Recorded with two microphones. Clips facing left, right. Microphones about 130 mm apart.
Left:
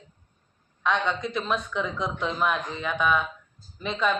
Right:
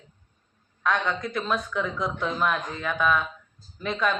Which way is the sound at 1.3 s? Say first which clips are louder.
Even; centre (ahead or behind).